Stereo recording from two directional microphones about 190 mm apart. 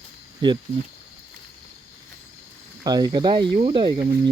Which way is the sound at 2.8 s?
20° right (ahead or behind).